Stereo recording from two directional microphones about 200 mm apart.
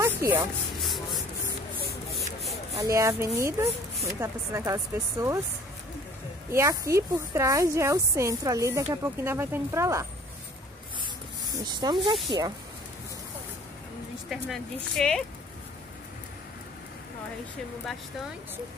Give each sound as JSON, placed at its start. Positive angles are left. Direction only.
{"t": 0.0, "sound": "music", "side_deg": -15}
{"t": 2.0, "sound": "spray", "side_deg": 0}
{"t": 2.7, "sound": "a woman's voice", "side_deg": -15}
{"t": 6.5, "sound": "a woman's voice", "side_deg": -15}
{"t": 11.5, "sound": "speech", "side_deg": -20}
{"t": 14.3, "sound": "speech", "side_deg": 0}